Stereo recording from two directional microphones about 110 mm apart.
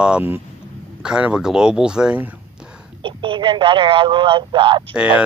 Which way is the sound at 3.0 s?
50° right (ahead or behind).